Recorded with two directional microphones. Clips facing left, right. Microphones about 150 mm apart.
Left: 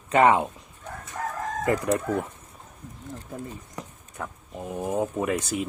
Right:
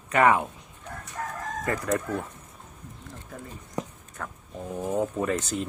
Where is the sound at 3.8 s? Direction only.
20° right (ahead or behind).